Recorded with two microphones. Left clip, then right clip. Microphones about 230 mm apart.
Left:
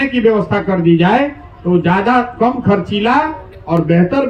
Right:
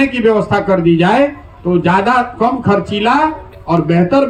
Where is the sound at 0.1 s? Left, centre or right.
Right.